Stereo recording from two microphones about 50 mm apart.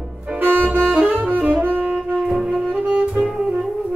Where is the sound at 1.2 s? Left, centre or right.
Right.